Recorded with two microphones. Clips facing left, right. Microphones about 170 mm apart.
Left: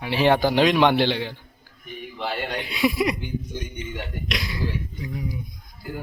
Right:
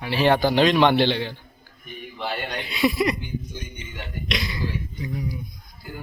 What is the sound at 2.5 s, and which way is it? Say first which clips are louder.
A man's voice: right 1 dB; 10° left (ahead or behind).